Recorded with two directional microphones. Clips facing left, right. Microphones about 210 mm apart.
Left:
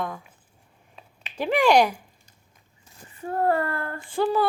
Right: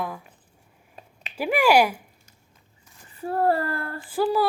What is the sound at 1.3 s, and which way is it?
Speech, 10° right (ahead or behind).